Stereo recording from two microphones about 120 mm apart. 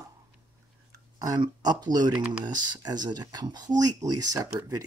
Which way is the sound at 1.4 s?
35° right (ahead or behind).